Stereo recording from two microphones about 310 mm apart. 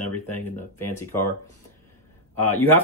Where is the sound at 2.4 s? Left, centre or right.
Centre.